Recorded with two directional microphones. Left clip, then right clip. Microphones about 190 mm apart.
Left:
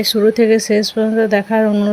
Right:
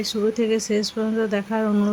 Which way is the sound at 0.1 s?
25° left (ahead or behind).